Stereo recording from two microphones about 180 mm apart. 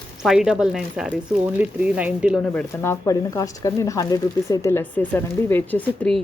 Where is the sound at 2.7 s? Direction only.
15° left (ahead or behind).